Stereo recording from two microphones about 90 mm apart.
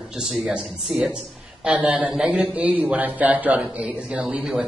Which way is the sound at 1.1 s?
10° right (ahead or behind).